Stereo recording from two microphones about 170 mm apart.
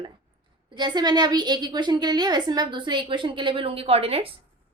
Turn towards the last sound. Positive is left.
turn(degrees=-35)  # may be behind; listen again after turning